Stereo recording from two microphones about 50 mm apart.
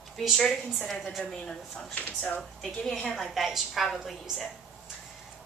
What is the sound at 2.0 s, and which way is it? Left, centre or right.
Speech, left.